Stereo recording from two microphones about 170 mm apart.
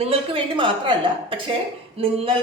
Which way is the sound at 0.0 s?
35° right (ahead or behind).